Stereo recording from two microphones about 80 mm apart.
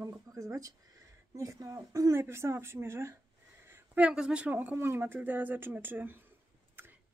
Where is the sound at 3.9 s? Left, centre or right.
Centre.